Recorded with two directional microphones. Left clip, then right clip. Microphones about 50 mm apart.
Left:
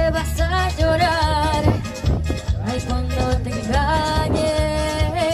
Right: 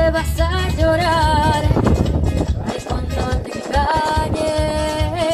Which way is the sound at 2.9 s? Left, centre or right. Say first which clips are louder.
Left 1 dB; right.